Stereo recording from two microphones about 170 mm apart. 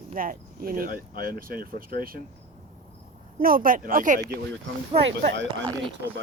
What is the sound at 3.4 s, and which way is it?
Speech, 55° right (ahead or behind).